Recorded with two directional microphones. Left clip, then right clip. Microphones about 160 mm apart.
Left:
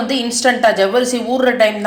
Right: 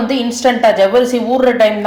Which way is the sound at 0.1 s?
5° left (ahead or behind).